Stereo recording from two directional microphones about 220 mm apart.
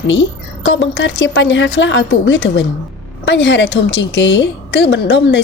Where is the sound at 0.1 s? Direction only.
55° left (ahead or behind).